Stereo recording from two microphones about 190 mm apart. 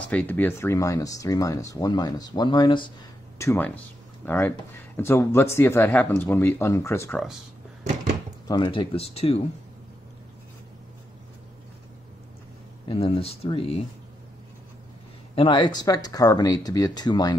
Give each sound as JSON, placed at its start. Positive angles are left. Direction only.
{"t": 0.0, "sound": "speech", "side_deg": 10}
{"t": 3.3, "sound": "speech", "side_deg": 15}
{"t": 8.5, "sound": "speech", "side_deg": 25}
{"t": 12.8, "sound": "speech", "side_deg": 30}
{"t": 15.3, "sound": "speech", "side_deg": 25}